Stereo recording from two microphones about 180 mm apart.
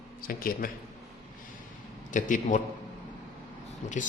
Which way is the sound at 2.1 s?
45° left (ahead or behind).